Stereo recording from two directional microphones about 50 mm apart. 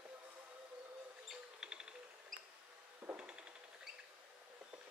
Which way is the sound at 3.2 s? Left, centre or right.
Right.